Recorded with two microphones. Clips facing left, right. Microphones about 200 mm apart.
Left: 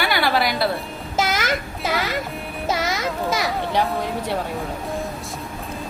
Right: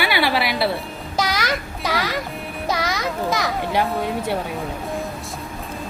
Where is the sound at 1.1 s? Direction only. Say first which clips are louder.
Left 1 dB; 15° right (ahead or behind).